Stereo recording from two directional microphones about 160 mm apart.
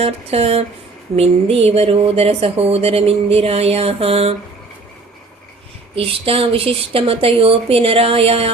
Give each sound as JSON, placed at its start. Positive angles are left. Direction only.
{"t": 0.0, "sound": "speech", "side_deg": -40}
{"t": 5.9, "sound": "speech", "side_deg": -35}